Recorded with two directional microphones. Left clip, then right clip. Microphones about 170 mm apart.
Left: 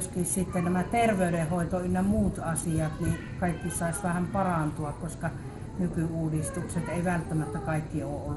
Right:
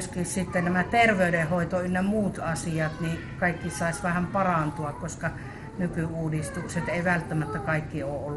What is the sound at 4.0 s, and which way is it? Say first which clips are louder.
Speech: right 3 dB; 15° right (ahead or behind).